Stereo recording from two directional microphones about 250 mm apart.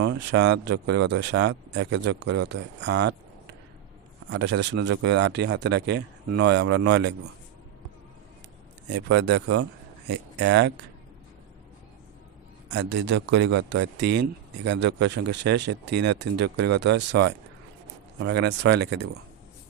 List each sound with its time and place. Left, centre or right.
0.0 s speech: right
4.3 s speech: right
8.9 s speech: right
12.7 s speech: right